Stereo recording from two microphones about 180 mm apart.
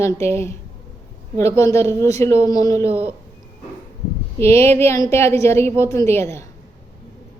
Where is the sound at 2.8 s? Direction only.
10° right (ahead or behind).